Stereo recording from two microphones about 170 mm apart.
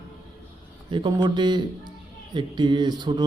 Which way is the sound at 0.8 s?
25° right (ahead or behind).